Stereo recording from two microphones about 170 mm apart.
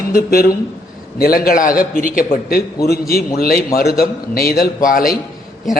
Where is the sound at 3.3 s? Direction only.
60° left (ahead or behind).